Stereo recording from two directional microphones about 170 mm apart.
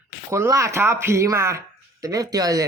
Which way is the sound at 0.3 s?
15° right (ahead or behind).